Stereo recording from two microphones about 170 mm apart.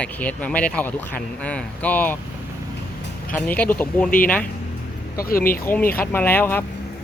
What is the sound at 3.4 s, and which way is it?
Speech, 10° left (ahead or behind).